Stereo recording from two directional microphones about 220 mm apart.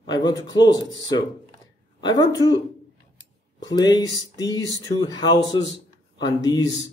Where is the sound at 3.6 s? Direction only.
20° left (ahead or behind).